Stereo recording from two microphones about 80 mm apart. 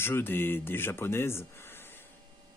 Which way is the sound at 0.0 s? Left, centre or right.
Left.